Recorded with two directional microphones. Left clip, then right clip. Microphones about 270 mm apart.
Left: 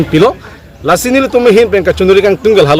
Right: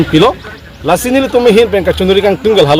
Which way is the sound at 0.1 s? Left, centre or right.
Centre.